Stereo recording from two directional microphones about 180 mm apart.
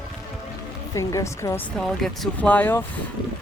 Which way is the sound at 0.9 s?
15° left (ahead or behind).